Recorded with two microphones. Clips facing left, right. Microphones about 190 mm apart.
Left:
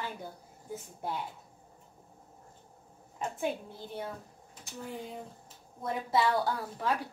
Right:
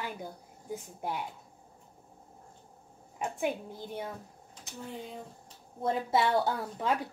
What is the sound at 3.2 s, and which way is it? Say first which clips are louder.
Speech: right 1 dB; 15° right (ahead or behind).